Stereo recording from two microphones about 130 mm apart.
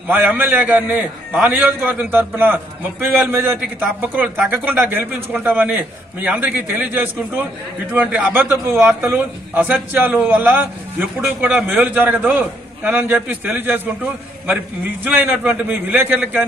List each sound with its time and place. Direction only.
0.1 s a man's voice: 15° right (ahead or behind)
15.0 s a man's voice: 15° right (ahead or behind)